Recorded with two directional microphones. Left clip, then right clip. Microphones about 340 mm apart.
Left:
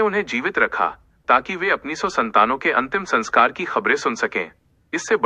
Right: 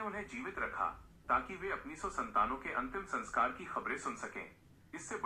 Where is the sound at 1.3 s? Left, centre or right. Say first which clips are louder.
Left 18 dB; left.